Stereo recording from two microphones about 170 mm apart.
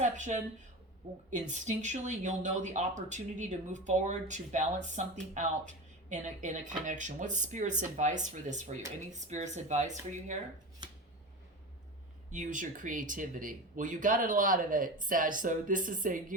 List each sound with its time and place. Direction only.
0.0 s speech: 45° right (ahead or behind)
12.3 s speech: 50° right (ahead or behind)